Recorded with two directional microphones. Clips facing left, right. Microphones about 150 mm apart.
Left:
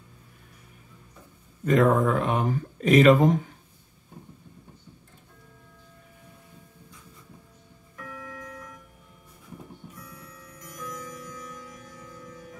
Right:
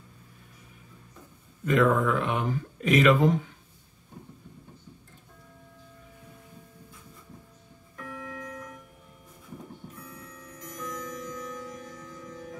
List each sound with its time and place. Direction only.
1.7 s speech: 40° left (ahead or behind)
8.2 s music: 20° right (ahead or behind)
10.6 s music: 5° left (ahead or behind)